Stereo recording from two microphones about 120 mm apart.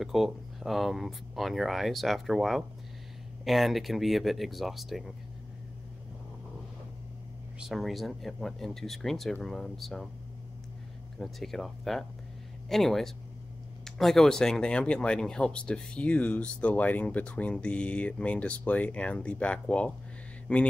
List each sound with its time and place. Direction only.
0.0 s speech: centre (ahead or behind)
7.6 s speech: centre (ahead or behind)
11.1 s speech: centre (ahead or behind)